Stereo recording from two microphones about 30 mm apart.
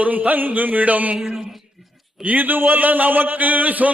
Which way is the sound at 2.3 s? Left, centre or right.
Right.